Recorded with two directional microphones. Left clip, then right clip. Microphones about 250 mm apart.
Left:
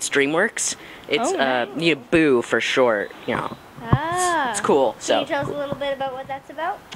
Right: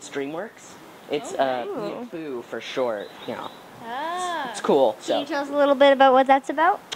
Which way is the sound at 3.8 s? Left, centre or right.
Left.